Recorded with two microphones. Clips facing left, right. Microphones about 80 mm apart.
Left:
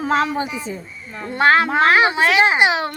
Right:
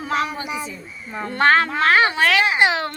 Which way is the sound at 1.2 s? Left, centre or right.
Centre.